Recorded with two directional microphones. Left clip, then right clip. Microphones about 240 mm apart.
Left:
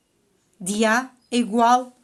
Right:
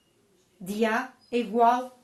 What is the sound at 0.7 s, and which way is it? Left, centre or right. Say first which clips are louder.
A woman's voice: left 6 dB; left.